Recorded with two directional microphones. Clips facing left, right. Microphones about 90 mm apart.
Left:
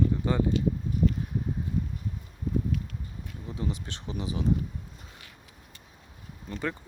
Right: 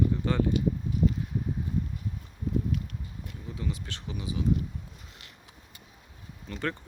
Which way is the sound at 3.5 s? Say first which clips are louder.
Left 2 dB; 25° left (ahead or behind).